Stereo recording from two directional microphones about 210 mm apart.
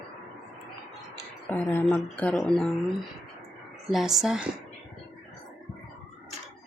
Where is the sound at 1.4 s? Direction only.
10° left (ahead or behind).